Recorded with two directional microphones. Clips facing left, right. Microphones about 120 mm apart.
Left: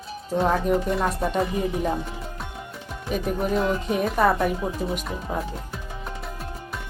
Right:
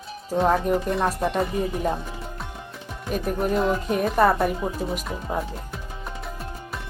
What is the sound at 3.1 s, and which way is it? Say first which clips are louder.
Speech: even; centre (ahead or behind).